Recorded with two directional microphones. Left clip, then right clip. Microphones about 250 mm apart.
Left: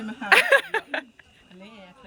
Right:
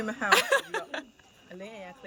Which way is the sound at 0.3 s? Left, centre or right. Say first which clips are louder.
Left 6 dB; centre.